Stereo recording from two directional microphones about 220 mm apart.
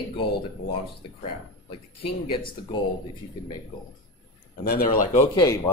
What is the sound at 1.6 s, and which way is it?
Speech, 25° left (ahead or behind).